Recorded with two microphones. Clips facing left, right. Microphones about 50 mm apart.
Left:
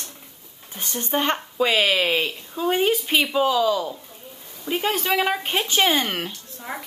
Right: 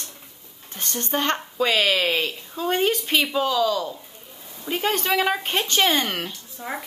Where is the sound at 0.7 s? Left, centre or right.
Centre.